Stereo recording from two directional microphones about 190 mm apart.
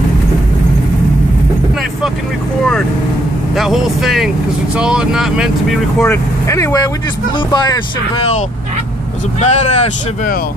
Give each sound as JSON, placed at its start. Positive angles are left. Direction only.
{"t": 3.5, "sound": "speech", "side_deg": 0}
{"t": 6.0, "sound": "speech", "side_deg": 15}
{"t": 9.4, "sound": "speech", "side_deg": 35}